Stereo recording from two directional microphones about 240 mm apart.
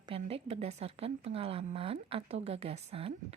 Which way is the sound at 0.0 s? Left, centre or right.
Right.